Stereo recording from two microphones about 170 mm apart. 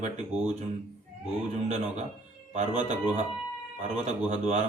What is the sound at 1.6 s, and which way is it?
A man's voice, 40° right (ahead or behind).